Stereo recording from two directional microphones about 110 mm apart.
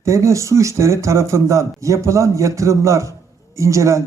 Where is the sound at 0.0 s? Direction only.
25° right (ahead or behind).